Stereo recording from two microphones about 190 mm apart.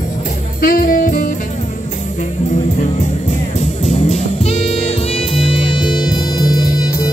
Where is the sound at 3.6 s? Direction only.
35° left (ahead or behind).